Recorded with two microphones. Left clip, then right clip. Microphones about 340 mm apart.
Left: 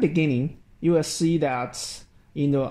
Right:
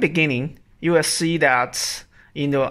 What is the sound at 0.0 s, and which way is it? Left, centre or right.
Speech, right.